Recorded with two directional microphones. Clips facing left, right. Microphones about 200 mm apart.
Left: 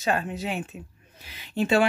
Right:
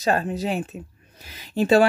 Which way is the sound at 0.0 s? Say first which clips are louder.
Right 4 dB; 40° right (ahead or behind).